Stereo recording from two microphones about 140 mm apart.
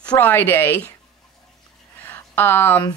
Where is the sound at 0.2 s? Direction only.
15° left (ahead or behind).